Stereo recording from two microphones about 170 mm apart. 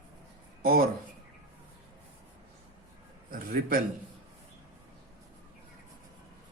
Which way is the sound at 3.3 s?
60° right (ahead or behind).